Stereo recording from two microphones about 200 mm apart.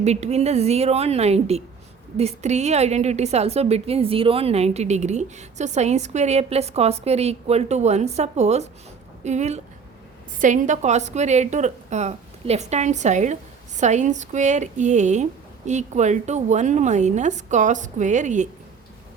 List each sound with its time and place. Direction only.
0.0 s a woman's voice: 35° right (ahead or behind)